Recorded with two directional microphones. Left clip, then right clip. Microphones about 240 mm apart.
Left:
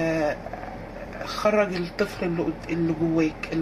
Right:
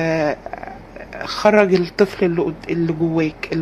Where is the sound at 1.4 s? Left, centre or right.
Right.